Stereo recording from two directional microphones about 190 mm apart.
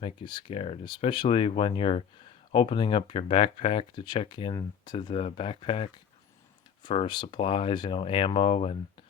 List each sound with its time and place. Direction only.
0.0 s speech: 25° left (ahead or behind)